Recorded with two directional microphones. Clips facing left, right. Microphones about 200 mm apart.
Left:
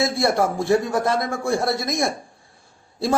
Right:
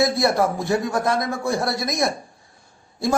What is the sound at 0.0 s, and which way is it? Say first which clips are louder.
A man's voice: right 1 dB; 25° left (ahead or behind).